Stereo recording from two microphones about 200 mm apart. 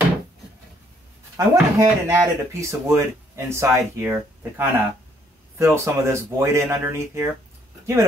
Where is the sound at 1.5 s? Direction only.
15° right (ahead or behind).